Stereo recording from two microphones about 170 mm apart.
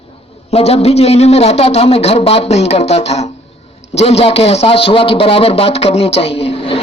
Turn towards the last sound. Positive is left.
turn(degrees=35)  # may be behind; listen again after turning